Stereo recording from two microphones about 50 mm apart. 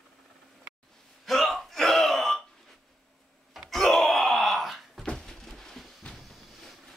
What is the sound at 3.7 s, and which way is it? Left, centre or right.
Wail, centre.